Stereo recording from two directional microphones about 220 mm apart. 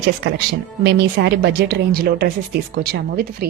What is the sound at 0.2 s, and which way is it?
Speech, 55° right (ahead or behind).